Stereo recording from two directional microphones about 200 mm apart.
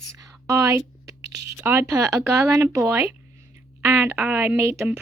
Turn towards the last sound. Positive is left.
turn(degrees=-10)  # may be behind; listen again after turning